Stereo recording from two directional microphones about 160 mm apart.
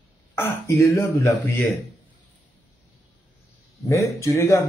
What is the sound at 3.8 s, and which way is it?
Speech, 20° left (ahead or behind).